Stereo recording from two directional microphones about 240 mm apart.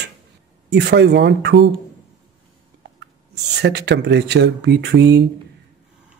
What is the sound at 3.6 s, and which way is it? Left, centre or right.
A man's voice, right.